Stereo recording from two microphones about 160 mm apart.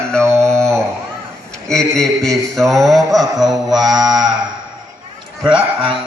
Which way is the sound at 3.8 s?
25° right (ahead or behind).